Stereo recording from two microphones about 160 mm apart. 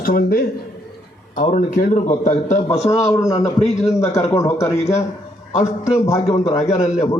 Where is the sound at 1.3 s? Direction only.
55° left (ahead or behind).